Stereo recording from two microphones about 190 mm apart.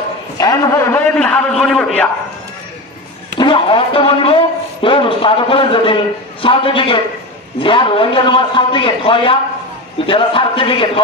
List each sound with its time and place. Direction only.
0.4 s a sound: 15° left (ahead or behind)
1.1 s a man's voice: 5° left (ahead or behind)
3.3 s a man's voice: 25° left (ahead or behind)